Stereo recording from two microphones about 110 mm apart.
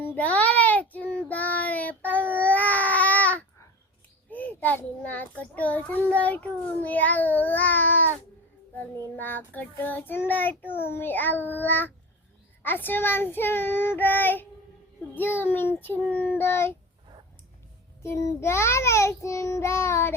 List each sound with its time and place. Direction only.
0.0 s child singing: 15° left (ahead or behind)
2.3 s baby cry: 15° left (ahead or behind)
4.3 s a child's voice: 15° left (ahead or behind)
9.1 s a child's voice: 20° left (ahead or behind)
18.0 s a child's voice: 25° left (ahead or behind)